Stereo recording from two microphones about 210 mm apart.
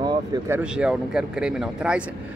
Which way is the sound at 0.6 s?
5° right (ahead or behind).